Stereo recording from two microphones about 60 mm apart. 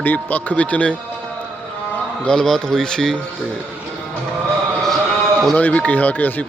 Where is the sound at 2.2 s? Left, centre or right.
Centre.